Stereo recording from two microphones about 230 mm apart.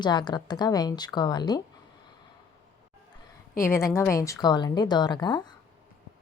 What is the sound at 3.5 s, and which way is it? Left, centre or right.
A woman's voice, centre.